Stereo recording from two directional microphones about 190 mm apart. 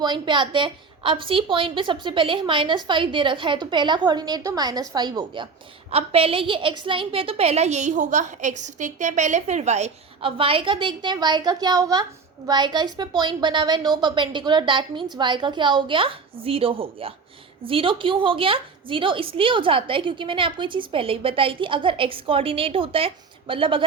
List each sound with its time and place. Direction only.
0.0 s a woman's voice: 25° right (ahead or behind)